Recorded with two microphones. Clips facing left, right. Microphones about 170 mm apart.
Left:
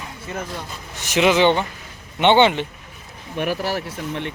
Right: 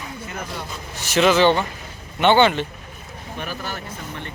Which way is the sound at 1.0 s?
15° left (ahead or behind).